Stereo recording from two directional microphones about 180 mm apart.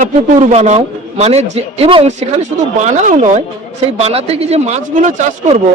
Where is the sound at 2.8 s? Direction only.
45° right (ahead or behind).